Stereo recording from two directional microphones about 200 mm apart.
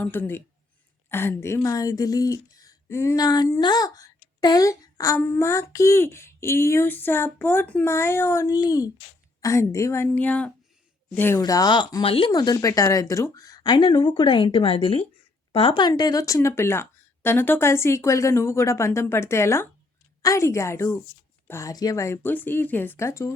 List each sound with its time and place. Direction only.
0.0 s speech: 10° left (ahead or behind)